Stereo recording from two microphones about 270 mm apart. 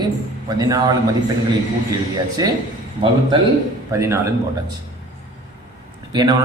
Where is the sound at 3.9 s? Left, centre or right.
Centre.